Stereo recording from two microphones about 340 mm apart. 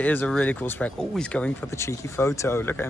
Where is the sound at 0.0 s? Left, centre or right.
Centre.